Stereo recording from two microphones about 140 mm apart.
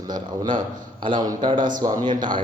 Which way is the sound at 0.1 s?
35° right (ahead or behind).